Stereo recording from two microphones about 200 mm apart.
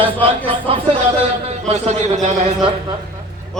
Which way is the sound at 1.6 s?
35° right (ahead or behind).